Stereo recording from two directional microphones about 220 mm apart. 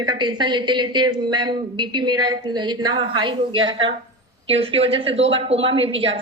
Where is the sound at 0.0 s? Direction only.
20° right (ahead or behind).